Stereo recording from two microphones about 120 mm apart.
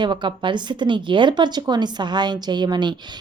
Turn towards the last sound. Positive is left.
turn(degrees=-40)  # may be behind; listen again after turning